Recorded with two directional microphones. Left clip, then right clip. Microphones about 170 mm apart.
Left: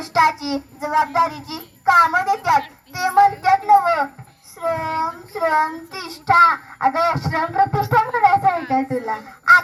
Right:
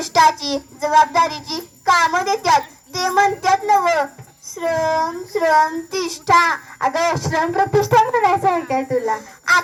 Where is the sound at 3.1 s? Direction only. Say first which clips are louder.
Left 2 dB; 30° left (ahead or behind).